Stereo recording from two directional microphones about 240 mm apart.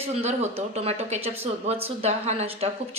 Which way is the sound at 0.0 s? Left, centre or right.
Right.